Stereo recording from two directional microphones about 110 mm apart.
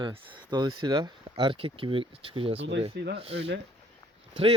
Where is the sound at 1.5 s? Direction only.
55° right (ahead or behind).